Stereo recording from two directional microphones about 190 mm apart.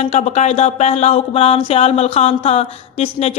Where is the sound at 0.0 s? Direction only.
35° left (ahead or behind).